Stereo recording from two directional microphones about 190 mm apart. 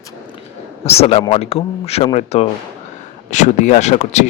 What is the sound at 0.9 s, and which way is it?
A man's voice, 30° left (ahead or behind).